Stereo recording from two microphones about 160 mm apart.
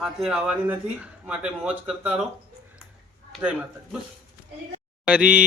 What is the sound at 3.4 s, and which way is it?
Mantra, 10° right (ahead or behind).